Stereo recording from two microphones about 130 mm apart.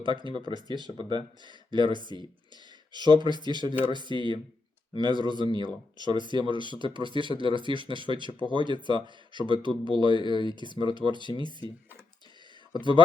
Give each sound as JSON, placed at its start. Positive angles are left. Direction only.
{"t": 0.0, "sound": "speech", "side_deg": -40}
{"t": 12.7, "sound": "speech", "side_deg": 35}